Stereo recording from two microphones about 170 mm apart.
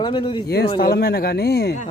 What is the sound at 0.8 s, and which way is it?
Speech, 60° left (ahead or behind).